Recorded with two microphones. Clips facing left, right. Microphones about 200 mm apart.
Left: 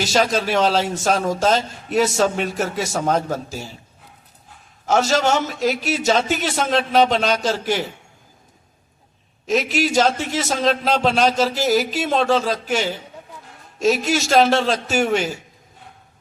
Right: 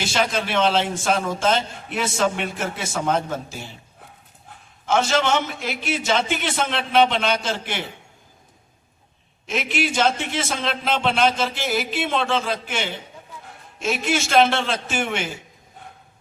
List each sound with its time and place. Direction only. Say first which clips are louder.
0.0 s a man's voice: left 4 dB; 40° left (ahead or behind)
4.9 s a man's voice: left 2 dB; 40° left (ahead or behind)
9.5 s a man's voice: left 5 dB; 40° left (ahead or behind)